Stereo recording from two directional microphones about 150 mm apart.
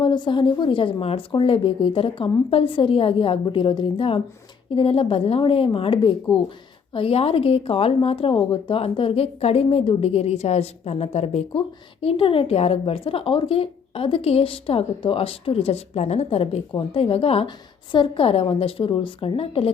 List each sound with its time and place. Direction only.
0.0 s speech: 30° left (ahead or behind)